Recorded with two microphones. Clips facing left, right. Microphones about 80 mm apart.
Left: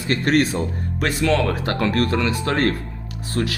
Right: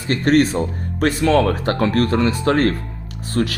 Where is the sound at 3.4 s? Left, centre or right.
Right.